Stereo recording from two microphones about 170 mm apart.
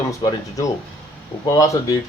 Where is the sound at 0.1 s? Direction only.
20° left (ahead or behind).